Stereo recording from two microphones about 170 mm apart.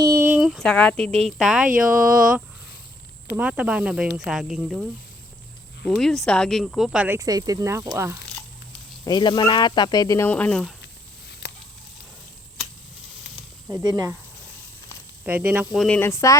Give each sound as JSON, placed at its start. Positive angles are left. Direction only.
{"t": 0.0, "sound": "speech", "side_deg": -15}
{"t": 3.3, "sound": "speech", "side_deg": -10}
{"t": 7.2, "sound": "speech", "side_deg": -20}
{"t": 9.0, "sound": "speech", "side_deg": 25}
{"t": 11.4, "sound": "a sound", "side_deg": 75}
{"t": 13.7, "sound": "speech", "side_deg": -15}
{"t": 15.2, "sound": "speech", "side_deg": -10}
{"t": 16.0, "sound": "speech", "side_deg": 15}